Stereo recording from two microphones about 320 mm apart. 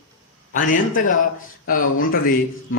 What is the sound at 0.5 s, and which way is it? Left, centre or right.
Speech, left.